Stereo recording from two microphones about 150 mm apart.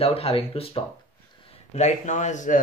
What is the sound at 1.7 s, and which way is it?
Speech, 50° left (ahead or behind).